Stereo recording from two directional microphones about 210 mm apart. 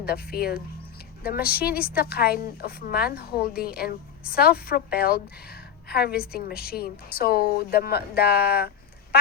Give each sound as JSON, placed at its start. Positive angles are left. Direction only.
{"t": 0.0, "sound": "a woman's voice", "side_deg": 50}